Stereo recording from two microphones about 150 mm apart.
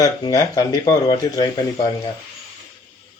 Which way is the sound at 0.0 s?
25° left (ahead or behind).